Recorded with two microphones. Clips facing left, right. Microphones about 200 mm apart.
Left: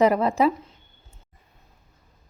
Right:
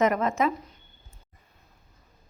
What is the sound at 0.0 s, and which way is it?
Speech, 35° left (ahead or behind).